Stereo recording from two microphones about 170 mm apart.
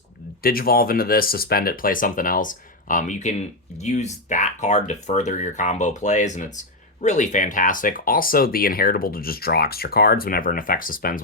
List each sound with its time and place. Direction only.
0.4 s speech: 60° left (ahead or behind)